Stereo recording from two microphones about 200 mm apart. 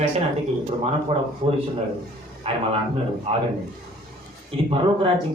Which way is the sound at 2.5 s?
30° right (ahead or behind).